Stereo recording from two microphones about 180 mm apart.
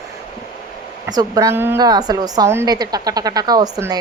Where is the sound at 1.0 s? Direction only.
20° right (ahead or behind).